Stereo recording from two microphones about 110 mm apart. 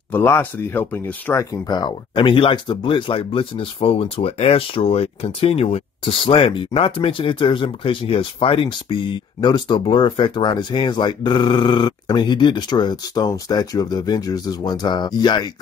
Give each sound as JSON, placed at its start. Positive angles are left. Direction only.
{"t": 0.1, "sound": "speech", "side_deg": 20}
{"t": 1.4, "sound": "speech", "side_deg": 35}